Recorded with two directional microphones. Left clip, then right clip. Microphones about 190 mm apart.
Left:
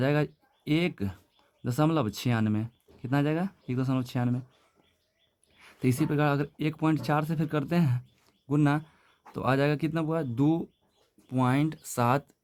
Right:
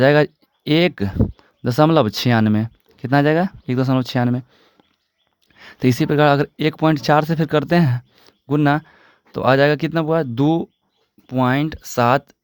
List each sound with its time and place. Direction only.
0.0 s speech: 50° right (ahead or behind)
5.5 s speech: 45° right (ahead or behind)